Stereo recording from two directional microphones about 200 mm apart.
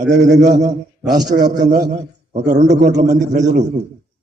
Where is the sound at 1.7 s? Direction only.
55° right (ahead or behind).